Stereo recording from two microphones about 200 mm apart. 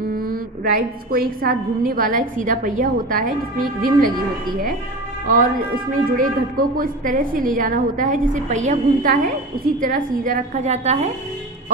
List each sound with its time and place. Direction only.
0.1 s a woman's voice: 45° right (ahead or behind)
5.2 s a woman's voice: 45° right (ahead or behind)